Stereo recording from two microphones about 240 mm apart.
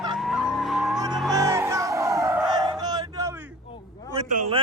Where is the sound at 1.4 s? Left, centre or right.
Centre.